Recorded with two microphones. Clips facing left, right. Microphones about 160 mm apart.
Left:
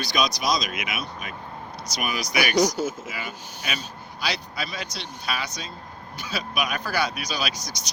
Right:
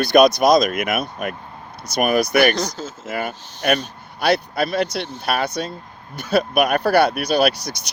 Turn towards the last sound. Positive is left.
turn(degrees=-60)  # may be behind; listen again after turning